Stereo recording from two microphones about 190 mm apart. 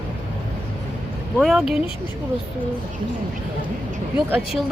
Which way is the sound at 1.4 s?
Centre (ahead or behind).